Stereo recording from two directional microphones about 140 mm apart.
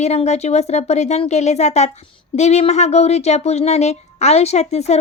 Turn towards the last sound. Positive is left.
turn(degrees=50)  # may be behind; listen again after turning